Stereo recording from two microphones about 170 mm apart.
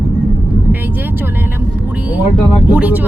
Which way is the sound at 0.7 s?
10° right (ahead or behind).